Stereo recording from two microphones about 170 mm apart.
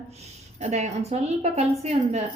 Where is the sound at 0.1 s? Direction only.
40° right (ahead or behind).